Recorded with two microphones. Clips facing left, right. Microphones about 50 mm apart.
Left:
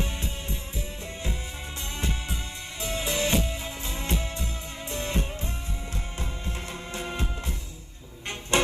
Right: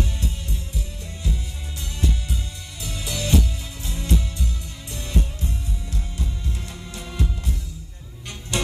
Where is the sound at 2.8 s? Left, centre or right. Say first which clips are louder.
Left 2 dB; left.